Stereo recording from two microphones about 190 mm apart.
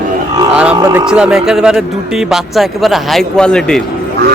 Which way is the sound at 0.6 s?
5° right (ahead or behind).